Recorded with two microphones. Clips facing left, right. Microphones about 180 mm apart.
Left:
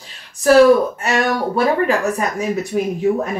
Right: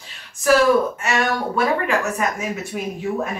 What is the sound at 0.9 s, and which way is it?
Speech, 35° left (ahead or behind).